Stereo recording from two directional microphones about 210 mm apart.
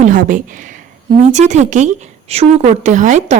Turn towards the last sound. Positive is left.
turn(degrees=-35)  # may be behind; listen again after turning